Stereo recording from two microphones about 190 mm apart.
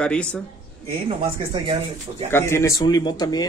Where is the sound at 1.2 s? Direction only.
30° right (ahead or behind).